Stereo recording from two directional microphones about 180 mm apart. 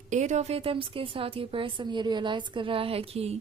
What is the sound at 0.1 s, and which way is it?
Speech, 40° right (ahead or behind).